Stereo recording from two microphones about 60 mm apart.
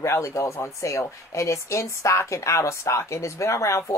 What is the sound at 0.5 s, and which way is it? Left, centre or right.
A woman's voice, left.